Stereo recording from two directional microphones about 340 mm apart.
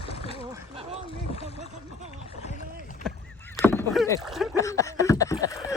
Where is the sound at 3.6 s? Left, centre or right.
Centre.